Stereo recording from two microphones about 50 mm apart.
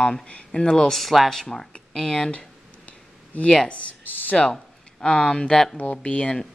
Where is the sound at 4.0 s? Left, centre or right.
Left.